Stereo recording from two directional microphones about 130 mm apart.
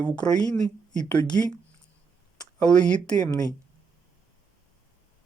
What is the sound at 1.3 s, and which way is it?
Speech, 20° left (ahead or behind).